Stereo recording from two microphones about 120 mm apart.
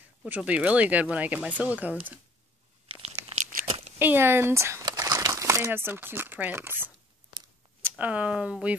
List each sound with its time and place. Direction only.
0.2 s speech: 10° right (ahead or behind)
2.9 s tearing: 60° right (ahead or behind)
4.0 s speech: 20° right (ahead or behind)
8.0 s speech: 10° right (ahead or behind)